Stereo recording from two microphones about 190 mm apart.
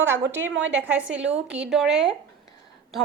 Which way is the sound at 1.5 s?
5° right (ahead or behind).